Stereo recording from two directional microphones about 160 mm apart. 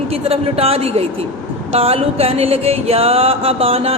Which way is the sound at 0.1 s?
40° right (ahead or behind).